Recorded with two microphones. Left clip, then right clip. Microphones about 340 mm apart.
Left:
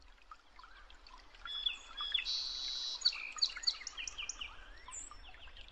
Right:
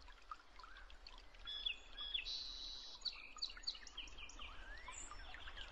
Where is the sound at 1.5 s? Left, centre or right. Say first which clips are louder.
Left 6 dB; centre; by 3.9 s left.